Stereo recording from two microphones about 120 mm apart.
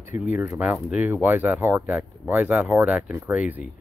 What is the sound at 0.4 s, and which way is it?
Speech, 15° right (ahead or behind).